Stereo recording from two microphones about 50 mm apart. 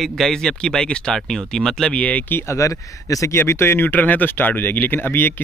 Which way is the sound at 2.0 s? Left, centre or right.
Left.